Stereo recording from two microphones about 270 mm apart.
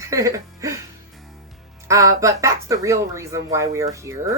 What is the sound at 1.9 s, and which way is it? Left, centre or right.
Speech, centre.